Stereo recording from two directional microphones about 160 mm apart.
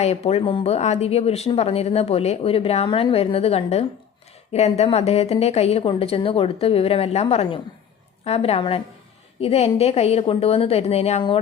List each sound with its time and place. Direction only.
0.0 s speech: 40° left (ahead or behind)